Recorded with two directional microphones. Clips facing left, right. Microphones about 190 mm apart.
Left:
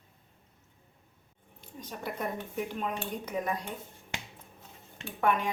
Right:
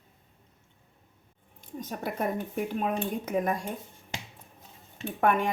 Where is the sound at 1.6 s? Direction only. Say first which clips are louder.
Right 5 dB; 45° right (ahead or behind).